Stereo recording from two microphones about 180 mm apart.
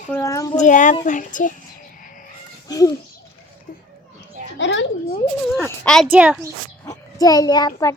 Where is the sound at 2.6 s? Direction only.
20° left (ahead or behind).